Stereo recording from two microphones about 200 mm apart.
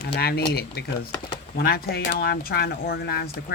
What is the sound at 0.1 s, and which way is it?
Speech, 50° left (ahead or behind).